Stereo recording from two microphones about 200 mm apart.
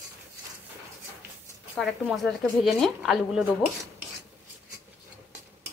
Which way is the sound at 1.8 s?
Centre (ahead or behind).